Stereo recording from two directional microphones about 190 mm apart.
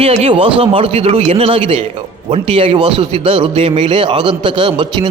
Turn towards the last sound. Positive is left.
turn(degrees=-25)  # may be behind; listen again after turning